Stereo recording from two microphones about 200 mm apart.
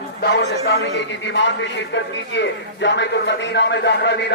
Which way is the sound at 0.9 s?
65° left (ahead or behind).